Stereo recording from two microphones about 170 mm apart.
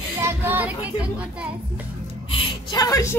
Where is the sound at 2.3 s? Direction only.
25° left (ahead or behind).